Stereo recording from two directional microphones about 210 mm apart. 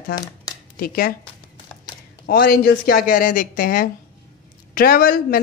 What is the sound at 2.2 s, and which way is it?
A woman's voice, 45° left (ahead or behind).